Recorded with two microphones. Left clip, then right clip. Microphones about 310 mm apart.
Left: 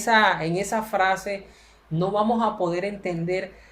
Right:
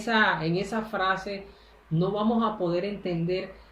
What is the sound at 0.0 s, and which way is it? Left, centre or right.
Speech, centre.